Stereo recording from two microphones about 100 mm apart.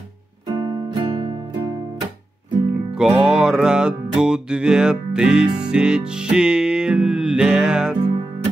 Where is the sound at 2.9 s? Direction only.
10° right (ahead or behind).